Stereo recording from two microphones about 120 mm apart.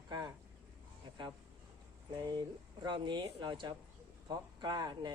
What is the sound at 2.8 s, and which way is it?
Speech, 40° right (ahead or behind).